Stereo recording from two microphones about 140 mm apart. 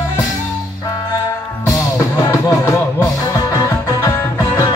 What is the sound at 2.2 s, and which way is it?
Music, 20° left (ahead or behind).